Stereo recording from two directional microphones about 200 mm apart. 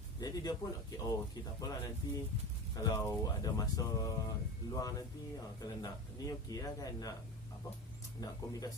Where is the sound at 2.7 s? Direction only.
15° left (ahead or behind).